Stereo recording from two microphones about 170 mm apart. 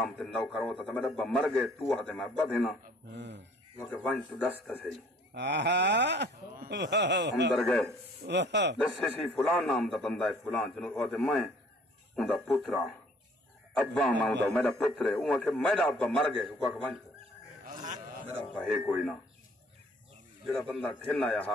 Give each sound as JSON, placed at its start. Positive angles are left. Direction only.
{"t": 0.0, "sound": "a man's voice", "side_deg": 5}
{"t": 3.2, "sound": "speech", "side_deg": -90}
{"t": 3.8, "sound": "a man's voice", "side_deg": 5}
{"t": 5.3, "sound": "speech", "side_deg": -90}
{"t": 7.5, "sound": "a man's voice", "side_deg": 0}
{"t": 8.2, "sound": "speech", "side_deg": -90}
{"t": 8.7, "sound": "a man's voice", "side_deg": 5}
{"t": 17.6, "sound": "a sound", "side_deg": -45}
{"t": 18.5, "sound": "a man's voice", "side_deg": 5}
{"t": 20.4, "sound": "a man's voice", "side_deg": 10}